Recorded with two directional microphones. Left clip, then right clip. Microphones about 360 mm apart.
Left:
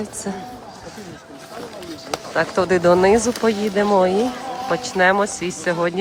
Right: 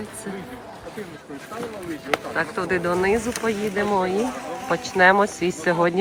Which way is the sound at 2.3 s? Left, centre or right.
Centre.